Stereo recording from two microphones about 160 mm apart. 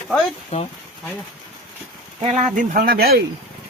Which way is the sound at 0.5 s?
40° left (ahead or behind).